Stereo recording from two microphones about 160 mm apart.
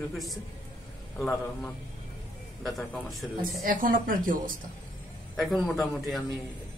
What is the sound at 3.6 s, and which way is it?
Speech, 60° right (ahead or behind).